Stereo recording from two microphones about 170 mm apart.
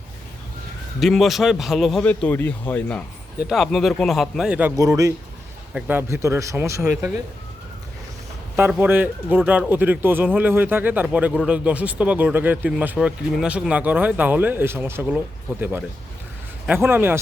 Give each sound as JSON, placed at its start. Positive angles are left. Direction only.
{"t": 0.9, "sound": "a man's voice", "side_deg": 0}
{"t": 2.0, "sound": "a man's voice", "side_deg": 10}
{"t": 4.8, "sound": "speech", "side_deg": -20}
{"t": 8.5, "sound": "speech", "side_deg": -10}
{"t": 16.6, "sound": "speech", "side_deg": -10}